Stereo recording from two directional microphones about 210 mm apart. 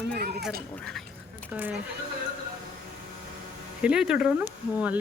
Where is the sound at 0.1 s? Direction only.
50° right (ahead or behind).